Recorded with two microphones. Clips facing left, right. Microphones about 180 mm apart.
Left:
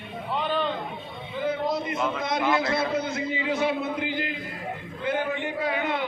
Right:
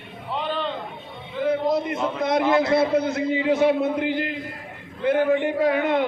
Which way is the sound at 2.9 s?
60° right (ahead or behind).